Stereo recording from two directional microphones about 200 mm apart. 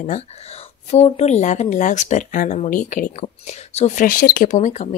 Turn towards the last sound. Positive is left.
turn(degrees=35)  # may be behind; listen again after turning